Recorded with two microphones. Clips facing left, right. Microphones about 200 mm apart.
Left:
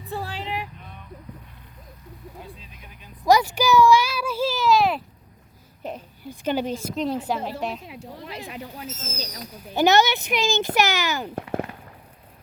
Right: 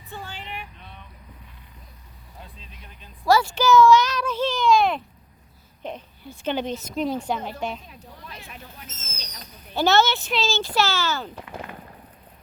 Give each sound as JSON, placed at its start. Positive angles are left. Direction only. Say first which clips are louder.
{"t": 0.1, "sound": "vehicle", "louder": "left 6 dB", "side_deg": 35}
{"t": 0.3, "sound": "vehicle", "louder": "left 7 dB", "side_deg": 90}
{"t": 2.4, "sound": "a sound", "louder": "left 4 dB", "side_deg": 10}
{"t": 5.8, "sound": "a woman's voice", "louder": "left 1 dB", "side_deg": 10}
{"t": 9.0, "sound": "speech", "louder": "left 8 dB", "side_deg": 35}
{"t": 9.4, "sound": "speech", "louder": "left 3 dB", "side_deg": 15}